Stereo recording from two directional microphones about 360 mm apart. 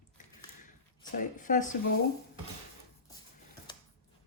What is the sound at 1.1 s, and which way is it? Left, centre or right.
Speech, left.